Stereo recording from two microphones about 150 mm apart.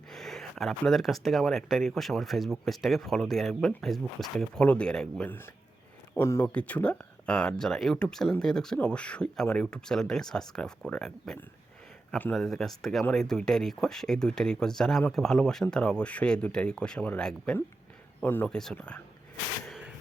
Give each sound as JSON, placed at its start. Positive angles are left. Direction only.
{"t": 0.1, "sound": "speech", "side_deg": 0}